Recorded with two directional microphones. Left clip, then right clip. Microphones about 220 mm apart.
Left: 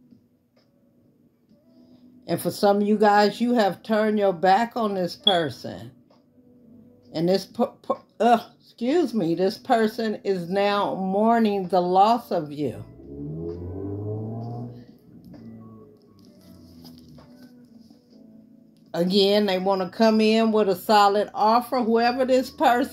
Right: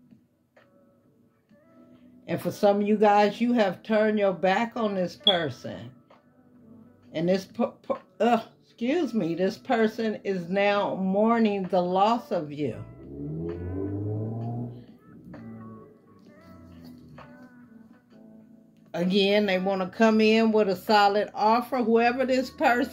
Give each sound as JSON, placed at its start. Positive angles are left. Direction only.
{"t": 2.2, "sound": "speech", "side_deg": 45}
{"t": 7.1, "sound": "speech", "side_deg": 45}
{"t": 18.9, "sound": "speech", "side_deg": 40}